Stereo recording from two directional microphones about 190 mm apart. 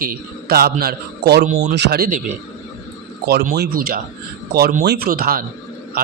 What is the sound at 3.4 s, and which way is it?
A man's voice, 55° right (ahead or behind).